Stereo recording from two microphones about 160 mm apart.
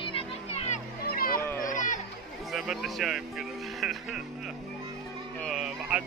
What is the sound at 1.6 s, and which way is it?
Music, 50° left (ahead or behind).